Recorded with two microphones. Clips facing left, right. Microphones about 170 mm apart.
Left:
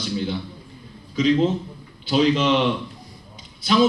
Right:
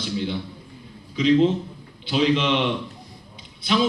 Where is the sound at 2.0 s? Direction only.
40° left (ahead or behind).